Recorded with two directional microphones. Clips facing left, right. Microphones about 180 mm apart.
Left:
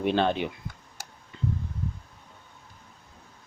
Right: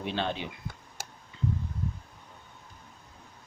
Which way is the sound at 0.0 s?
55° left (ahead or behind).